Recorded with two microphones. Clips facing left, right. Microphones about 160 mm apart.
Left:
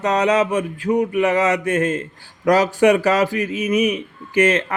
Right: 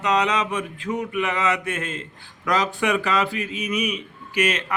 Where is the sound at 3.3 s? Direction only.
20° right (ahead or behind).